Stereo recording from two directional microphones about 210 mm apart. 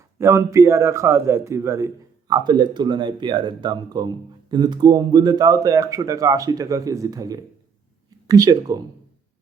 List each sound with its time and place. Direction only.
0.2 s a man's voice: 15° right (ahead or behind)